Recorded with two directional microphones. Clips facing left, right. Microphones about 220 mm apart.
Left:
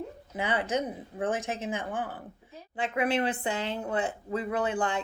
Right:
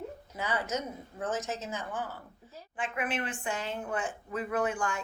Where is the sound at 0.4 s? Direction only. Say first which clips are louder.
Left 4 dB; 30° left (ahead or behind).